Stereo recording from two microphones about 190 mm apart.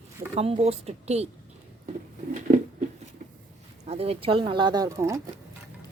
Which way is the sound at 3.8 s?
30° right (ahead or behind).